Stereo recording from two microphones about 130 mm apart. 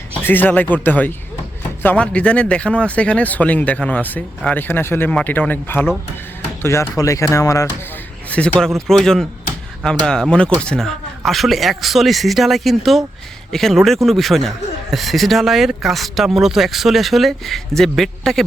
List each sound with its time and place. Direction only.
0.1 s speech: 15° left (ahead or behind)
8.3 s speech: 10° left (ahead or behind)